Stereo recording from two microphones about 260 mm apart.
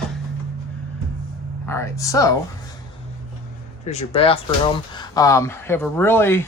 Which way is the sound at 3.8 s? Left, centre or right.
Left.